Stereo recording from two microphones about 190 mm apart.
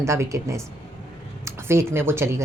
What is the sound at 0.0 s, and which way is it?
Speech, 15° right (ahead or behind).